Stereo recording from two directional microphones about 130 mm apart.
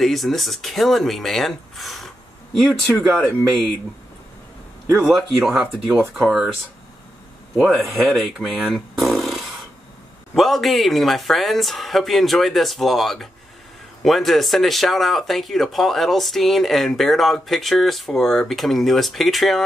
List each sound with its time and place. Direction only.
0.0 s speech: centre (ahead or behind)
5.1 s speech: 5° right (ahead or behind)
5.9 s speech: 15° right (ahead or behind)
6.2 s speech: 5° right (ahead or behind)
7.5 s speech: 5° right (ahead or behind)
10.3 s speech: centre (ahead or behind)